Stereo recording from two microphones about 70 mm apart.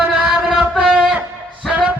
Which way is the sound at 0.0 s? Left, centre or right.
Centre.